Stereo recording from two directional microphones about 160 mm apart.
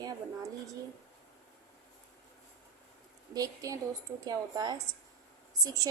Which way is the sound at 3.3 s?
20° right (ahead or behind).